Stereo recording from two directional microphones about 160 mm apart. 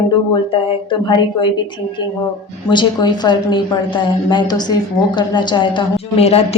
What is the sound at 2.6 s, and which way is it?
A woman's voice, 30° left (ahead or behind).